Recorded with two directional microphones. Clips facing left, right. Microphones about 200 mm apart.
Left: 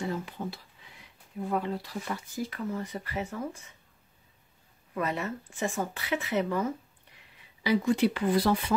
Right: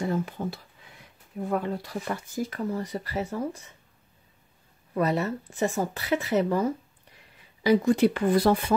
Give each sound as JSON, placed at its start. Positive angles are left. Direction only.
{"t": 0.1, "sound": "speech", "side_deg": -50}
{"t": 4.9, "sound": "speech", "side_deg": -35}